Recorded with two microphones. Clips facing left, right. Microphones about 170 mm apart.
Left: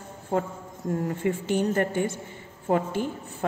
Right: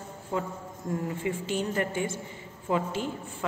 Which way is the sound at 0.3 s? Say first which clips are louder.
Left 5 dB; 55° left (ahead or behind).